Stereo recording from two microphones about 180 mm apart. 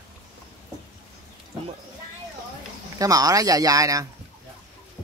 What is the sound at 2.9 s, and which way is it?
Speech, 20° right (ahead or behind).